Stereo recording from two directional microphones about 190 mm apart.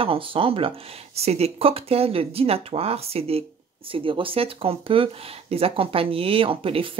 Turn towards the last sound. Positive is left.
turn(degrees=-30)  # may be behind; listen again after turning